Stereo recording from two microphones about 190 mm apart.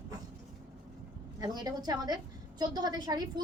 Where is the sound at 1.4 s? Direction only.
20° right (ahead or behind).